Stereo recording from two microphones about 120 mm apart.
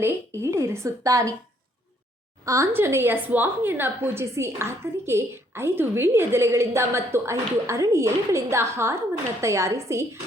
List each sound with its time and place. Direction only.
0.0 s a woman's voice: 20° right (ahead or behind)
2.4 s a woman's voice: 25° right (ahead or behind)